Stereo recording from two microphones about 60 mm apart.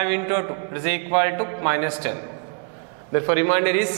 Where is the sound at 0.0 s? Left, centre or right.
Centre.